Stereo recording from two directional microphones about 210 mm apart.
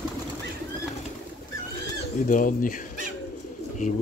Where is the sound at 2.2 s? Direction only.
40° left (ahead or behind).